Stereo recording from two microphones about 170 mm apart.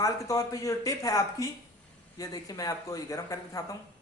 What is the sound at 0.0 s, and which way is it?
Speech, 20° left (ahead or behind).